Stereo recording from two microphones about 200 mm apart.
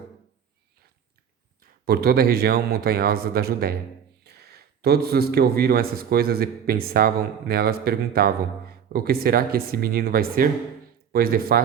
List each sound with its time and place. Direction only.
1.8 s speech: 50° right (ahead or behind)